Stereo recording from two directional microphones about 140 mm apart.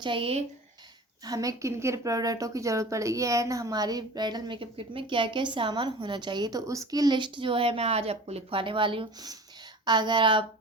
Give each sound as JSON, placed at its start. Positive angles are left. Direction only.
{"t": 0.0, "sound": "speech", "side_deg": -40}
{"t": 1.2, "sound": "speech", "side_deg": -25}